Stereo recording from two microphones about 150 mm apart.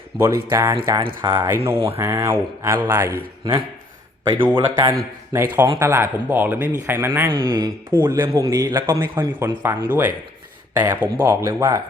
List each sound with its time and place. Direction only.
0.2 s speech: 20° right (ahead or behind)
4.5 s speech: 25° right (ahead or behind)